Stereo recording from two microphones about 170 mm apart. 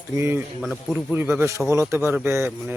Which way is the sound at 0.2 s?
15° right (ahead or behind).